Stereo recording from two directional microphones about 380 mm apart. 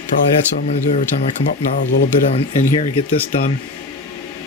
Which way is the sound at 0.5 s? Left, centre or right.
Centre.